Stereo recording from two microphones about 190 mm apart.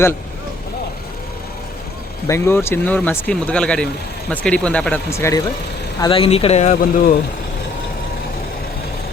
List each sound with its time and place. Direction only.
2.2 s speech: 15° left (ahead or behind)
6.0 s speech: 25° left (ahead or behind)